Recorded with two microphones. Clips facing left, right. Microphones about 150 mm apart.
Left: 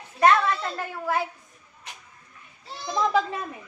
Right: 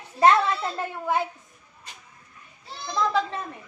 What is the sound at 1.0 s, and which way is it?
Speech, 20° right (ahead or behind).